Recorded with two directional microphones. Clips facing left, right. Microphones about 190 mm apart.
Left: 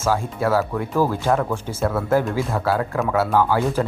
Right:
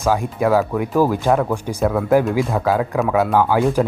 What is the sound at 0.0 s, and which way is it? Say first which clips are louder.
Speech: right 3 dB; 15° right (ahead or behind).